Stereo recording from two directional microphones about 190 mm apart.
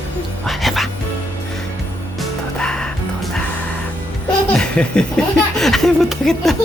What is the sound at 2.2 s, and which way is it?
Music, 5° left (ahead or behind).